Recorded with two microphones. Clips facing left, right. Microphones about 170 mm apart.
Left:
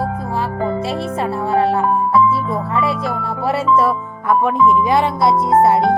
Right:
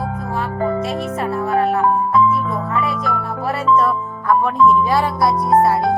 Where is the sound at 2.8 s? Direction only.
30° left (ahead or behind).